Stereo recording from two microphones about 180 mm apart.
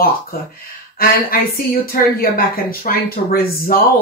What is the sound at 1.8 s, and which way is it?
Speech, 55° left (ahead or behind).